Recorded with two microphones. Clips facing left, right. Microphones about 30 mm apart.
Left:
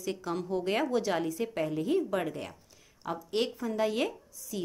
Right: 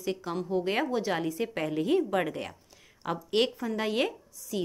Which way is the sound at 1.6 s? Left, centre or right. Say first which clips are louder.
Right 2 dB; right.